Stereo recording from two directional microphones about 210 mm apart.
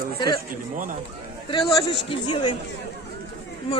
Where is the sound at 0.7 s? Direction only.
40° right (ahead or behind).